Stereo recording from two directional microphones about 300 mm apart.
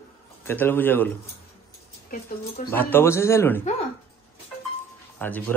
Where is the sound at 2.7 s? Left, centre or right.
Centre.